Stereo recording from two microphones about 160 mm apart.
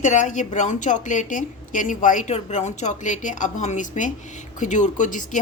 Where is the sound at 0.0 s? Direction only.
50° left (ahead or behind).